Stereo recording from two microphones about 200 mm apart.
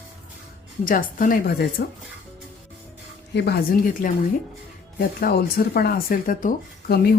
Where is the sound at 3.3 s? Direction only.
55° left (ahead or behind).